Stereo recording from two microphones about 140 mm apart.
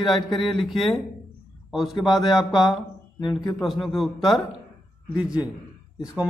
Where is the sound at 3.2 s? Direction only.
30° left (ahead or behind).